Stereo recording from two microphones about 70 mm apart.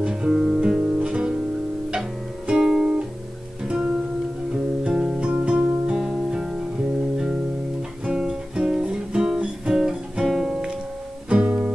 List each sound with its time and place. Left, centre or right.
0.0 s guitar: centre
1.9 s music: centre
5.0 s music: centre
11.2 s music: centre